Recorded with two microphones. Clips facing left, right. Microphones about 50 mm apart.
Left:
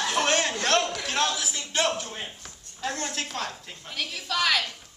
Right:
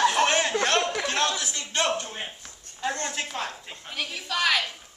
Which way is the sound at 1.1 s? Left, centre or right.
Centre.